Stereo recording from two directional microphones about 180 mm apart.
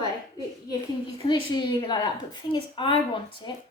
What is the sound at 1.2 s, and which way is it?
A woman's voice, 25° left (ahead or behind).